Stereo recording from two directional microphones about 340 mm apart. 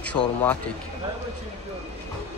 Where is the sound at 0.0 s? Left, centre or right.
Centre.